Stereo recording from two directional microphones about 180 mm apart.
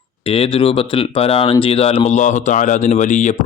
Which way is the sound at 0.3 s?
30° left (ahead or behind).